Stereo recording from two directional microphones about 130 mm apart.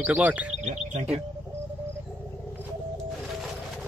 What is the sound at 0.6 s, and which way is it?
Speech, 65° right (ahead or behind).